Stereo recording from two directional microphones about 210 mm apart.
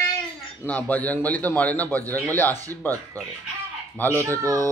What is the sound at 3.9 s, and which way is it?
Speech, 10° left (ahead or behind).